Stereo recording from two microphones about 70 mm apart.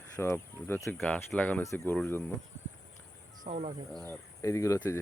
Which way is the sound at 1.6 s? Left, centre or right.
Left.